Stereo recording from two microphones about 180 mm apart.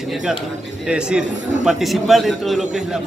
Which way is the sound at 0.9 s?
5° right (ahead or behind).